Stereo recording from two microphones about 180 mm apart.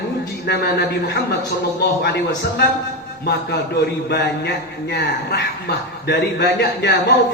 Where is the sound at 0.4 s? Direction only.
65° left (ahead or behind).